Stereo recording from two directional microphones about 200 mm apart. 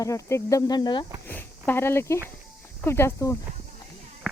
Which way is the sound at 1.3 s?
10° left (ahead or behind).